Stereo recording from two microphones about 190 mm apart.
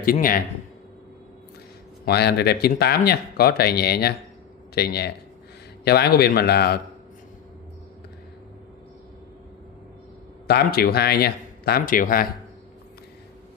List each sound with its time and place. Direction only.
0.0 s speech: 50° left (ahead or behind)
2.0 s a man's voice: 60° left (ahead or behind)
10.4 s a man's voice: 55° left (ahead or behind)